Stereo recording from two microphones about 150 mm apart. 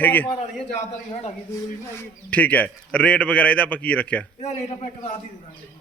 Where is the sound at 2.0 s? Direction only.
10° left (ahead or behind).